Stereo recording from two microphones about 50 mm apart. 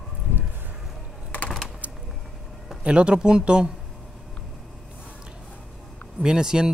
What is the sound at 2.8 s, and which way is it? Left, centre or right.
Speech, right.